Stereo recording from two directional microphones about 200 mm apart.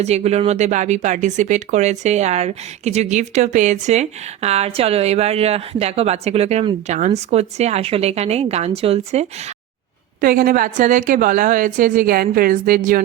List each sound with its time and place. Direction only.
0.0 s speech: 35° right (ahead or behind)
10.2 s a woman's voice: 45° right (ahead or behind)